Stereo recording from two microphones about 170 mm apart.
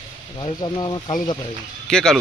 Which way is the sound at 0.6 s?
25° left (ahead or behind).